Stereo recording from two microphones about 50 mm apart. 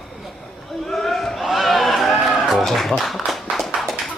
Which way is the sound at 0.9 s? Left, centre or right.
Centre.